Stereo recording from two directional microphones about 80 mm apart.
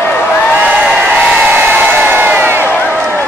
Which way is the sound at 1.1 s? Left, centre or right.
Right.